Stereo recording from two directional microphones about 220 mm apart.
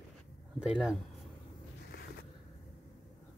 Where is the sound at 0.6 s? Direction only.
5° right (ahead or behind).